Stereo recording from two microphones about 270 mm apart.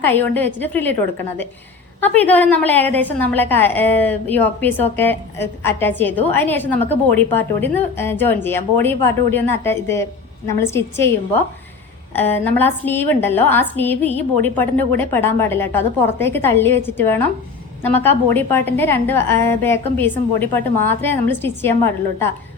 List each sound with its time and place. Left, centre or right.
0.0 s a woman's voice: centre
2.1 s a woman's voice: centre
12.1 s a woman's voice: centre